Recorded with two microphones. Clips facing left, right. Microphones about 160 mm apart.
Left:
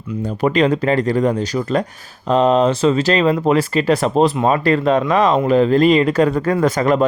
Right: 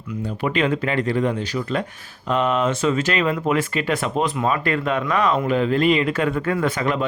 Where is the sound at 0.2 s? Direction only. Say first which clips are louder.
Left 6 dB; 40° left (ahead or behind).